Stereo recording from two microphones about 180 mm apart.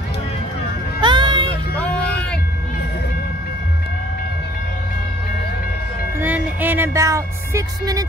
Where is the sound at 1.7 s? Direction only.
5° left (ahead or behind).